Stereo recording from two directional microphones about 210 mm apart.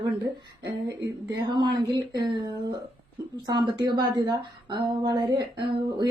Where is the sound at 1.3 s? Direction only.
20° right (ahead or behind).